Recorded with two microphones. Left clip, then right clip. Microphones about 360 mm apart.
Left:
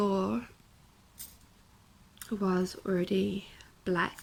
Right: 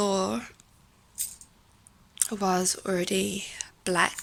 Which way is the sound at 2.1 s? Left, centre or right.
Centre.